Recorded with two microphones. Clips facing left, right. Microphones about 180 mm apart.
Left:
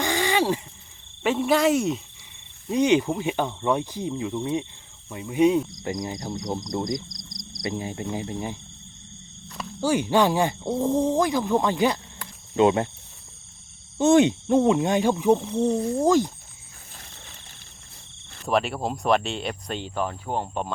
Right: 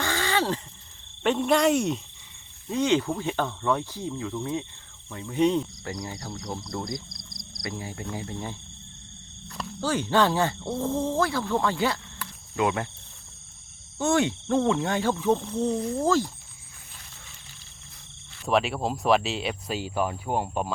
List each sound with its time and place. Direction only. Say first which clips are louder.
0.0 s a sound: left 3 dB; 15° left (ahead or behind)
1.2 s speech: left 1 dB; 5° left (ahead or behind)
2.6 s speech: left 4 dB; 15° left (ahead or behind)
9.8 s speech: left 3 dB; 10° left (ahead or behind)
14.0 s speech: left 7 dB; 20° left (ahead or behind)
18.4 s speech: even; centre (ahead or behind)